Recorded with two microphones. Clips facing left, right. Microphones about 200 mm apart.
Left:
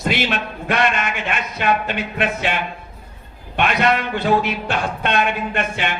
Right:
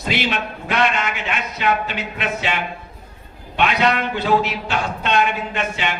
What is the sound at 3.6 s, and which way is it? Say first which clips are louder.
A man's voice: even; 55° left (ahead or behind).